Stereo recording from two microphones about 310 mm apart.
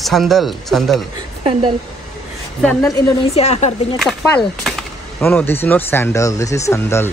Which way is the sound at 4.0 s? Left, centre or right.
Centre.